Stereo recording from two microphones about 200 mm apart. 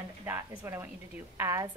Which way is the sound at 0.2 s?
10° right (ahead or behind).